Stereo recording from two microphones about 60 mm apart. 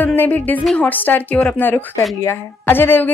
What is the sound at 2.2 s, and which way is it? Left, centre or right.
Speech, left.